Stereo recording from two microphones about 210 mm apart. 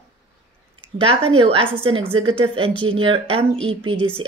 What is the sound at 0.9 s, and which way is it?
A woman's voice, 25° right (ahead or behind).